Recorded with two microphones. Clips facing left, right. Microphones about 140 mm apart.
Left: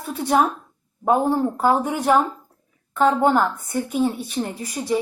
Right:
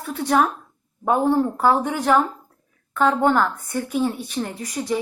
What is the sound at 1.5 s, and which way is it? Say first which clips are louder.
Speech: even; 15° left (ahead or behind).